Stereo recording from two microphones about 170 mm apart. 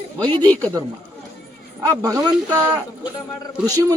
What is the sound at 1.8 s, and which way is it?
Speech, 20° right (ahead or behind).